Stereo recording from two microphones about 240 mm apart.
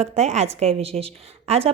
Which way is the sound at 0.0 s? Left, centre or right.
Right.